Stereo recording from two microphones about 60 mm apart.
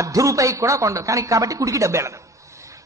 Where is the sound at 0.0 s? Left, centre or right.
Right.